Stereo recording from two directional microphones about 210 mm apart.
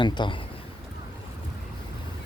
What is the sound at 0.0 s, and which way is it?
Speech, 20° left (ahead or behind).